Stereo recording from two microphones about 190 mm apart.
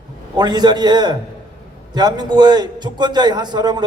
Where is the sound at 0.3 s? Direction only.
20° right (ahead or behind).